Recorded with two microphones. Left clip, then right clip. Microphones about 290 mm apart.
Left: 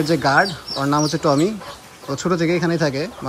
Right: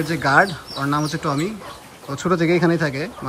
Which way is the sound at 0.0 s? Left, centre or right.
Centre.